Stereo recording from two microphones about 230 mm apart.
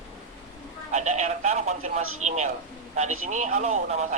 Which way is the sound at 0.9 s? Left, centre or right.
Right.